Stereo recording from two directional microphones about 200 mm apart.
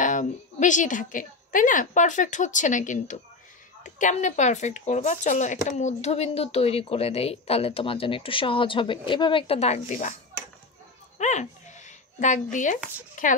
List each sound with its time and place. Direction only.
0.0 s a woman's voice: 40° left (ahead or behind)
11.1 s a sound: 35° left (ahead or behind)
13.2 s speech: 40° left (ahead or behind)